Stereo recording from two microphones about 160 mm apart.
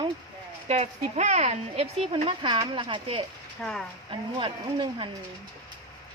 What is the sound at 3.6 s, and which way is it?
Speech, 5° left (ahead or behind).